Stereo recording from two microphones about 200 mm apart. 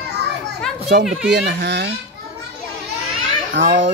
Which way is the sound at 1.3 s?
60° right (ahead or behind).